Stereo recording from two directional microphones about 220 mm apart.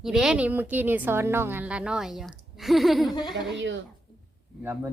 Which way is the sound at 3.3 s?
55° right (ahead or behind).